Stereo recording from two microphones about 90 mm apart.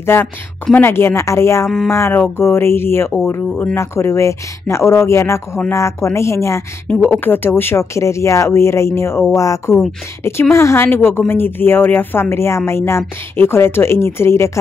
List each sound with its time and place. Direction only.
0.0 s a woman's voice: 25° left (ahead or behind)
6.9 s a woman's voice: 20° left (ahead or behind)